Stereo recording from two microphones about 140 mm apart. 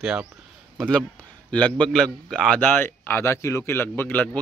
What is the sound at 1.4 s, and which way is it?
A man's voice, 10° left (ahead or behind).